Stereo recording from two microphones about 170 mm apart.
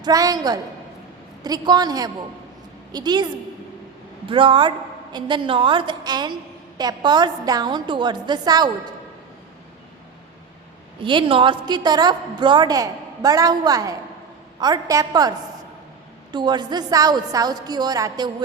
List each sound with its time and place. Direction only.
0.0 s a woman's voice: 20° right (ahead or behind)
4.3 s a woman's voice: 30° right (ahead or behind)
11.0 s a woman's voice: 30° right (ahead or behind)